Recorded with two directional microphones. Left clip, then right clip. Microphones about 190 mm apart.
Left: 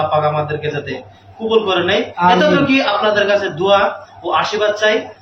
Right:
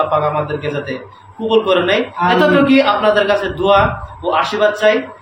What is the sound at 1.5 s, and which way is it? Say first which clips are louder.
A man's voice: right 1 dB; 20° right (ahead or behind).